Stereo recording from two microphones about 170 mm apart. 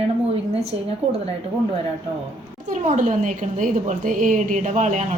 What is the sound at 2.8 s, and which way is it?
A woman's voice, 45° right (ahead or behind).